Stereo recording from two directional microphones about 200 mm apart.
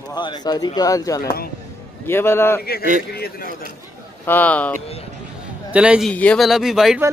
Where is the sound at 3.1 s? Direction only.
50° left (ahead or behind).